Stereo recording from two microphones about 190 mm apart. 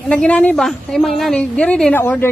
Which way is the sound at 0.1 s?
5° left (ahead or behind).